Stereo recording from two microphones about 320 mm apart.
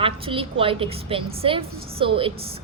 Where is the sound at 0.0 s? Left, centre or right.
Centre.